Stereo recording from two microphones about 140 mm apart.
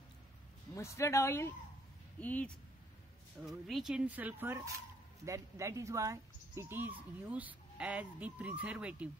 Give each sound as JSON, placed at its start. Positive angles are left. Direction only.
{"t": 0.7, "sound": "speech", "side_deg": 20}
{"t": 3.4, "sound": "speech", "side_deg": 0}